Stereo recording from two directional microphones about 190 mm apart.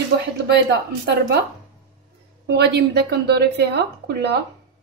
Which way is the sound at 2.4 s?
65° right (ahead or behind).